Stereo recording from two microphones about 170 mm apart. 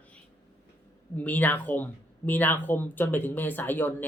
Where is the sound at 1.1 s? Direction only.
10° left (ahead or behind).